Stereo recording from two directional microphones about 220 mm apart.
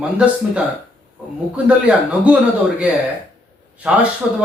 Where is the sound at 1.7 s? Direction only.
5° right (ahead or behind).